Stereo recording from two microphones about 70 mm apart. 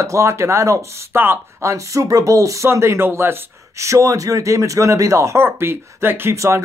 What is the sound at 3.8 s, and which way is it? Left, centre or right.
Speech, right.